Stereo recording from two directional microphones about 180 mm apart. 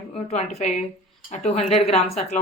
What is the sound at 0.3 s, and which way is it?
Speech, 40° left (ahead or behind).